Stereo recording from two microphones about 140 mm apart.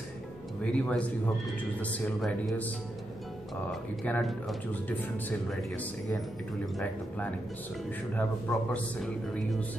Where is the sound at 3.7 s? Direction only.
10° left (ahead or behind).